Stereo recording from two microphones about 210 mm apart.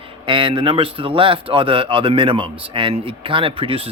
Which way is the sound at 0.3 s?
25° right (ahead or behind).